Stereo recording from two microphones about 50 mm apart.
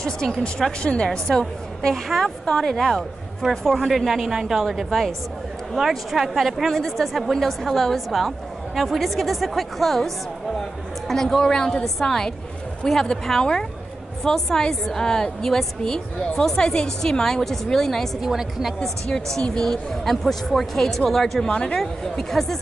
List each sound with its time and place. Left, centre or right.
0.0 s a woman's voice: centre
18.2 s a woman's voice: centre
18.8 s a woman's voice: centre
21.5 s speech: left
21.7 s a woman's voice: centre